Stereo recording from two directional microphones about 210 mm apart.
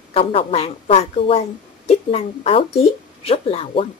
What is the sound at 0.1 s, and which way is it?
Speech, 25° left (ahead or behind).